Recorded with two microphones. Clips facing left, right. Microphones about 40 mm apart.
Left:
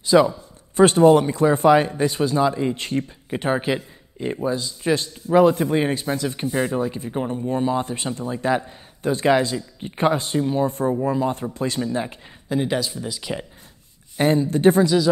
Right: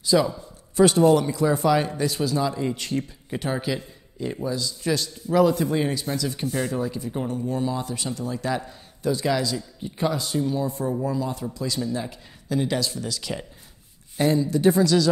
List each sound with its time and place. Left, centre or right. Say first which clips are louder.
0.0 s a man's voice: left 5 dB; left
10.7 s a man's voice: left 4 dB; left; by 13.5 s centre
14.1 s speech: left 2 dB; left